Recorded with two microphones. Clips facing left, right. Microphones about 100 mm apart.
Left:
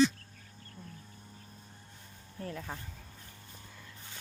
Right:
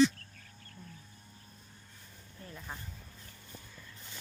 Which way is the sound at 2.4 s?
65° left (ahead or behind).